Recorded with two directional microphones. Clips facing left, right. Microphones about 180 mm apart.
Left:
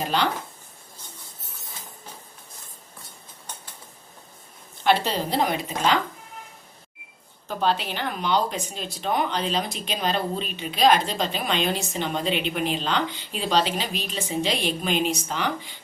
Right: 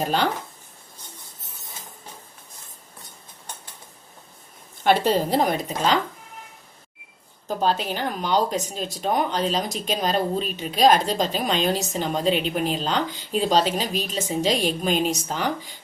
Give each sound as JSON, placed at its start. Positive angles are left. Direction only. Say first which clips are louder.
{"t": 0.0, "sound": "speech", "louder": "right 2 dB", "side_deg": -45}
{"t": 4.8, "sound": "a woman's voice", "louder": "right 3 dB", "side_deg": -45}
{"t": 7.4, "sound": "speech", "louder": "right 2 dB", "side_deg": -40}